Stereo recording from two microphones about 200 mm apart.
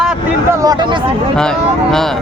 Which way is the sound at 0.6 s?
20° right (ahead or behind).